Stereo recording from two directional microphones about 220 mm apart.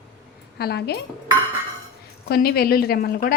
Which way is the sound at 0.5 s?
45° left (ahead or behind).